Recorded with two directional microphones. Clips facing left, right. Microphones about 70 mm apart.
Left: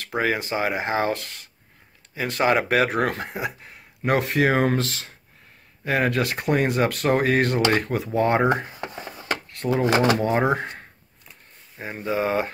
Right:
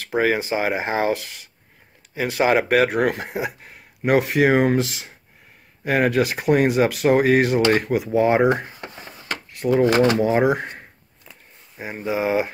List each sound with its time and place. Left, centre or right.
0.2 s speech: centre
2.7 s speech: centre
3.1 s speech: centre
8.8 s a sound: centre
9.8 s speech: centre
10.1 s speech: centre